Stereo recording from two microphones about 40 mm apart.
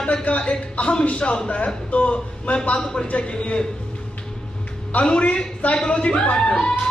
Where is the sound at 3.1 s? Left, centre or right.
Left.